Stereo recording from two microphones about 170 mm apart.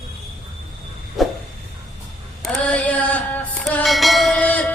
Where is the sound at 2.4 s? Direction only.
5° left (ahead or behind).